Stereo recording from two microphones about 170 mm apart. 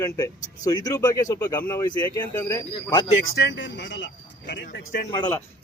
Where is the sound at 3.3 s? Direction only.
85° left.